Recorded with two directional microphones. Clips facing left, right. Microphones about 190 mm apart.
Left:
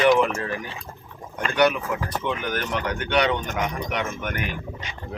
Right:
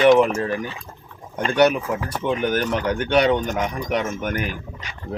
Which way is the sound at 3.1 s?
40° right (ahead or behind).